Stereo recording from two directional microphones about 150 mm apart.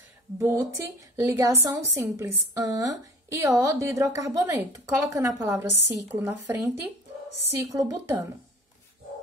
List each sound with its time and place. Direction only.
0.4 s a woman's voice: 15° right (ahead or behind)